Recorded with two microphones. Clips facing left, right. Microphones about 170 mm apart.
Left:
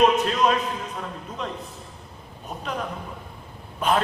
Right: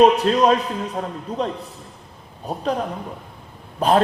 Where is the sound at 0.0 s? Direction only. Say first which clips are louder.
Right 5 dB; 35° right (ahead or behind).